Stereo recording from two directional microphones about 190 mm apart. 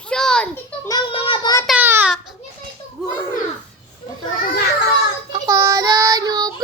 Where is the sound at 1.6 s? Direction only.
10° right (ahead or behind).